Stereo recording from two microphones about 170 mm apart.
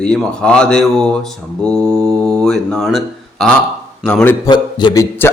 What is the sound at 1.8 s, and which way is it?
Mantra, 20° right (ahead or behind).